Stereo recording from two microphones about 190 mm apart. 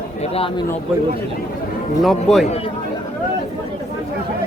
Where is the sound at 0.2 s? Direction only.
30° left (ahead or behind).